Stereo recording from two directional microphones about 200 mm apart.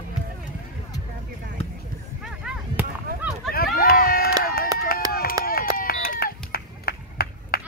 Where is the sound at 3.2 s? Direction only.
5° right (ahead or behind).